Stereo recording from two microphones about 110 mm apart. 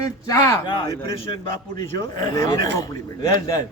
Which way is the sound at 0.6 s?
45° left (ahead or behind).